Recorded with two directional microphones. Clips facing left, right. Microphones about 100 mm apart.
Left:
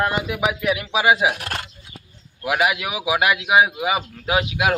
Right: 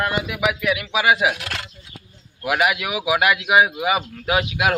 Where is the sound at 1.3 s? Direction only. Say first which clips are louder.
Left 2 dB; 40° left (ahead or behind).